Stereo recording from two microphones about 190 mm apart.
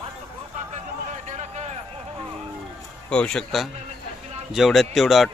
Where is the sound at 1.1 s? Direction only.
40° right (ahead or behind).